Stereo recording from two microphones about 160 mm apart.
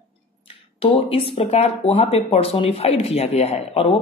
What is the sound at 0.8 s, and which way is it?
Speech, 35° left (ahead or behind).